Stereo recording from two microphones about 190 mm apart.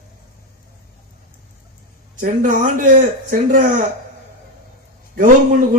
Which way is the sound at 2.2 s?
40° right (ahead or behind).